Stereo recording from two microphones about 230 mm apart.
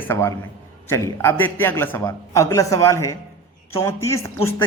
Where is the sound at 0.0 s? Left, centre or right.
Centre.